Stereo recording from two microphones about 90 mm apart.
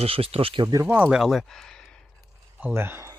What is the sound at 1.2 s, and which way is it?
Speech, centre (ahead or behind).